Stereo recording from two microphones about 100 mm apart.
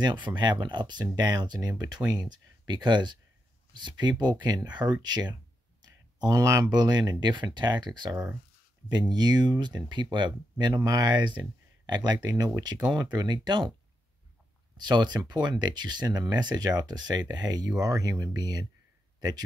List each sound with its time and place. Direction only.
0.0 s speech: 55° right (ahead or behind)
14.8 s speech: 45° right (ahead or behind)
19.1 s a sound: 40° right (ahead or behind)